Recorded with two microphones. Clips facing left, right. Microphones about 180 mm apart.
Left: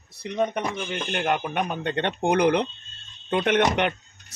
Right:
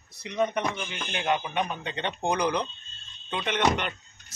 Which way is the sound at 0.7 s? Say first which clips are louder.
Left 6 dB; 45° left (ahead or behind).